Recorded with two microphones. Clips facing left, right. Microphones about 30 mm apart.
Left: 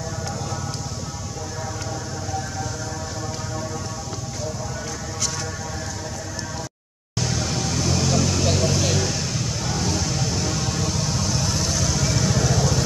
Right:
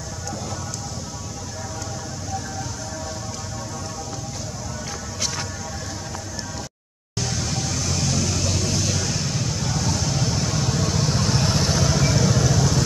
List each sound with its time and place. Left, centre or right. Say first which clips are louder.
7.2 s vehicle: left 2 dB; centre
11.2 s vehicle: right 3 dB; right
12.1 s vehicle: right 1 dB; centre